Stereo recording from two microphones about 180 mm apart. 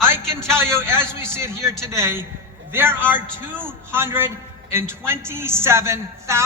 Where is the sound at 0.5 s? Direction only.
15° right (ahead or behind).